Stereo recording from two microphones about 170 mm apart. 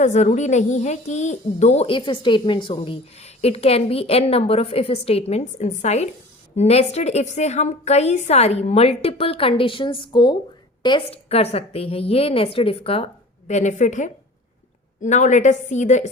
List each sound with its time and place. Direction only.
0.0 s a woman's voice: 45° left (ahead or behind)
13.5 s a woman's voice: 45° left (ahead or behind)